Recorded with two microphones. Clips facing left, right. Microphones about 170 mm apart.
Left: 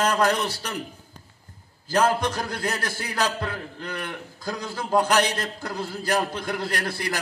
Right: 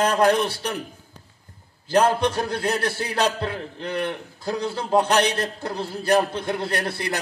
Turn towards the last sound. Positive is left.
turn(degrees=-30)  # may be behind; listen again after turning